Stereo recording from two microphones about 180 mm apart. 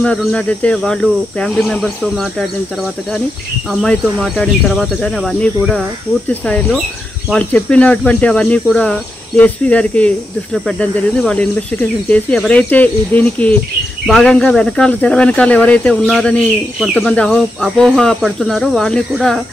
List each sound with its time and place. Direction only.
0.0 s speech: 5° left (ahead or behind)
3.8 s speech: 5° left (ahead or behind)